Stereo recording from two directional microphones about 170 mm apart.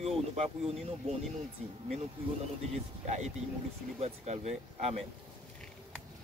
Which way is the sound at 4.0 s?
40° right (ahead or behind).